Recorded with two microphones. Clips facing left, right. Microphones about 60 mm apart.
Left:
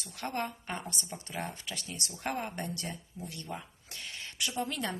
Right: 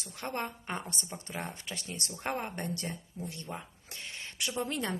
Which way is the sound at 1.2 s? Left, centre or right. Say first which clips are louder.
Left 1 dB; right.